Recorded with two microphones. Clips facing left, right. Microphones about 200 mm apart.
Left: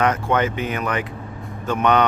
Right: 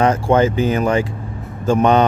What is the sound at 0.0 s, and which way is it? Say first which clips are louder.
Speech: right 5 dB; 30° right (ahead or behind).